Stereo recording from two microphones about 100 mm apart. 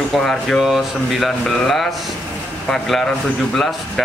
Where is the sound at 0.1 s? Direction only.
5° left (ahead or behind).